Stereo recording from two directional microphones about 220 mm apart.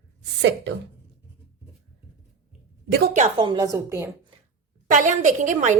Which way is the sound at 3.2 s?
25° right (ahead or behind).